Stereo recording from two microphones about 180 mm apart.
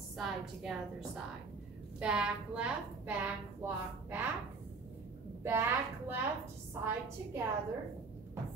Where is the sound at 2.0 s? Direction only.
5° right (ahead or behind).